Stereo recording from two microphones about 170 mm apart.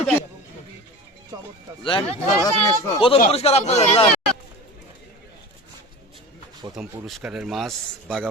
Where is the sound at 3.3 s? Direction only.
35° left (ahead or behind).